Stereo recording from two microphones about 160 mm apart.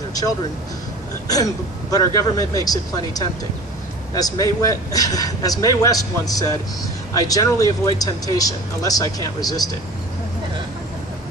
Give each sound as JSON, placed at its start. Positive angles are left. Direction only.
{"t": 1.2, "sound": "speech", "side_deg": 20}